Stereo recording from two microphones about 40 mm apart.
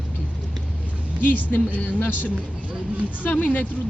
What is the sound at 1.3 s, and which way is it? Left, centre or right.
Speech, left.